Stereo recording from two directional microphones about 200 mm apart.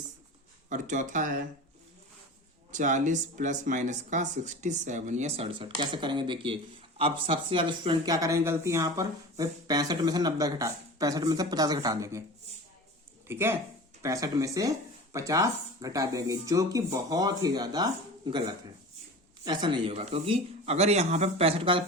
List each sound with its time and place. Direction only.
0.7 s speech: 40° right (ahead or behind)
2.7 s speech: 40° right (ahead or behind); by 12.2 s 15° right (ahead or behind)
13.2 s speech: 10° right (ahead or behind); by 21.8 s 25° right (ahead or behind)